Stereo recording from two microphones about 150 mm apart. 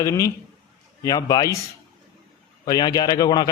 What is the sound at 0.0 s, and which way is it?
A man's voice, 20° left (ahead or behind).